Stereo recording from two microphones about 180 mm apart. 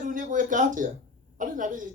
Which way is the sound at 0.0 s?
45° right (ahead or behind).